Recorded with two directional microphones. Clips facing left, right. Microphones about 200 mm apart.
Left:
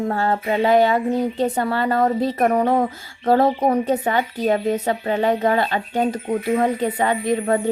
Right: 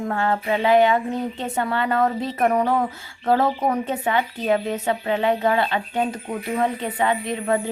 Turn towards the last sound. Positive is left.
turn(degrees=40)  # may be behind; listen again after turning